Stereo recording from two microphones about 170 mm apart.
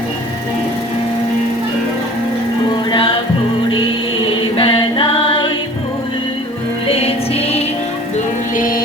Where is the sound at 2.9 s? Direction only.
30° left (ahead or behind).